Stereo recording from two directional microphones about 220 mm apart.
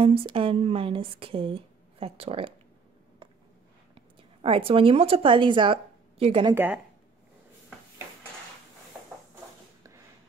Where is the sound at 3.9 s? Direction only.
25° right (ahead or behind).